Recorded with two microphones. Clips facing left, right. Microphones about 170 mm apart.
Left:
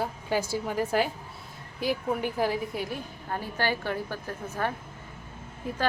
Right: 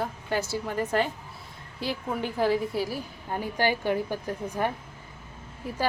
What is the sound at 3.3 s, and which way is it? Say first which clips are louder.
A woman's voice: right 3 dB; 15° right (ahead or behind).